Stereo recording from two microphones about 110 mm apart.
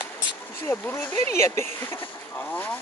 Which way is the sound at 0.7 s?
20° left (ahead or behind).